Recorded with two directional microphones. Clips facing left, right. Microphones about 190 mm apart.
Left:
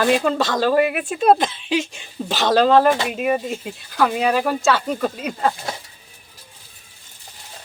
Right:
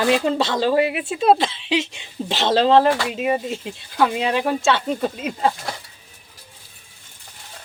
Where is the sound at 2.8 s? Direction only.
20° left (ahead or behind).